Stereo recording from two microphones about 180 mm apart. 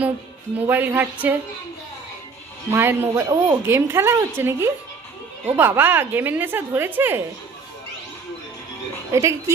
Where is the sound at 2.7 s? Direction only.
15° right (ahead or behind).